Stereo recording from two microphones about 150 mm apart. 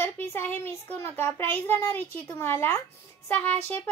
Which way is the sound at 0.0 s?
15° left (ahead or behind).